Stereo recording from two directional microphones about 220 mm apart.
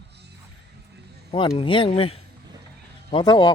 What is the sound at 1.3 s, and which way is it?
A man's voice, 25° left (ahead or behind).